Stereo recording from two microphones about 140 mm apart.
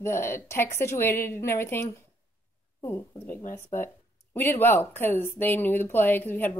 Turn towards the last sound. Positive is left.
turn(degrees=15)  # may be behind; listen again after turning